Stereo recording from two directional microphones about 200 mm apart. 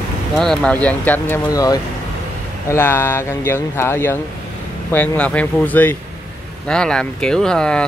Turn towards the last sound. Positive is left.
turn(degrees=5)  # may be behind; listen again after turning